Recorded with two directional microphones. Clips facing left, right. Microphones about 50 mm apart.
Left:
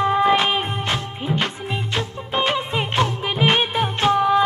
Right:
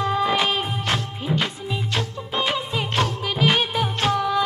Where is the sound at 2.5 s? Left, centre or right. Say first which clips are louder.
Left 3 dB; left.